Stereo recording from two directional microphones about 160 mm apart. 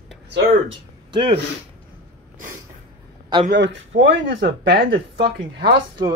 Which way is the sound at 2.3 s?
55° right (ahead or behind).